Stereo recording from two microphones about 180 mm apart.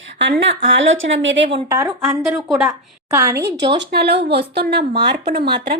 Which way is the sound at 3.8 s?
65° right (ahead or behind).